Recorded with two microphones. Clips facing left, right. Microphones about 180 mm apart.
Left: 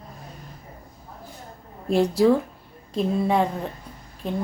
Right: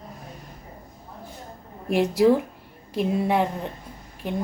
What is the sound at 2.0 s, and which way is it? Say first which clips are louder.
A woman's voice: even; 5° right (ahead or behind).